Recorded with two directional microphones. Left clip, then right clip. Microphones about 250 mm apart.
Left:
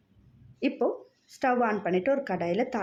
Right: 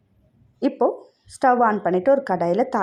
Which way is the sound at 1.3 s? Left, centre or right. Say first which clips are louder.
Right 9 dB; centre.